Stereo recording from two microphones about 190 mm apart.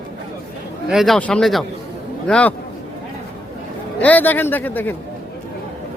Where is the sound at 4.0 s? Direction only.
10° left (ahead or behind).